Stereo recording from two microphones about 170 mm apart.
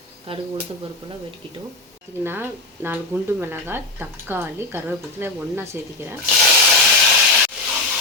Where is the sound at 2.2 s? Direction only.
15° right (ahead or behind).